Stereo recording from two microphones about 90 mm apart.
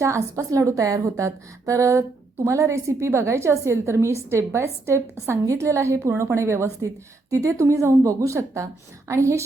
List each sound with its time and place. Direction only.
0.0 s a woman's voice: 35° right (ahead or behind)